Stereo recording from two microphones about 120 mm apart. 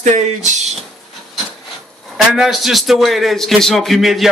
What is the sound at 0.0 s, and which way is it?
Speech, 90° right.